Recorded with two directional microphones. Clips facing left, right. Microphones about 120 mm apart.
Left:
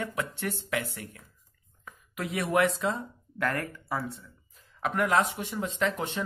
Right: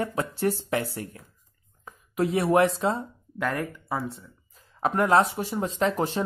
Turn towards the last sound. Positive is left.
turn(degrees=-35)  # may be behind; listen again after turning